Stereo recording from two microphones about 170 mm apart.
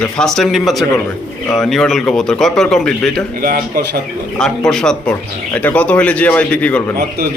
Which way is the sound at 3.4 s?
60° right (ahead or behind).